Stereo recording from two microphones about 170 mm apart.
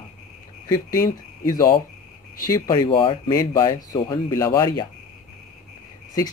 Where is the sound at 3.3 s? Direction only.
20° left (ahead or behind).